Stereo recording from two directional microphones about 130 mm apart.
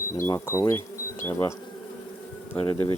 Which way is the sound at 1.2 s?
20° left (ahead or behind).